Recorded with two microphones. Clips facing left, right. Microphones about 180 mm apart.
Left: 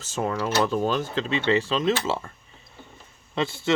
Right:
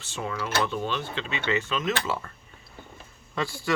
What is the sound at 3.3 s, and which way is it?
Speech, 25° left (ahead or behind).